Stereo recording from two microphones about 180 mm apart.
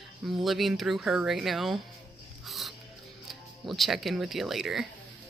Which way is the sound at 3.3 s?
Centre (ahead or behind).